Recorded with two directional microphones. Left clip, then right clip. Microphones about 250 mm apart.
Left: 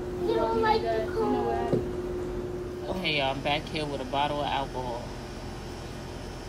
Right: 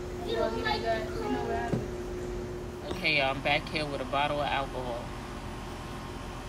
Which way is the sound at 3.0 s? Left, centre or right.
Centre.